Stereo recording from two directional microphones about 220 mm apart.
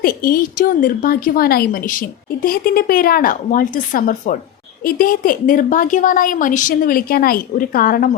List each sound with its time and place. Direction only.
0.0 s a woman's voice: 40° left (ahead or behind)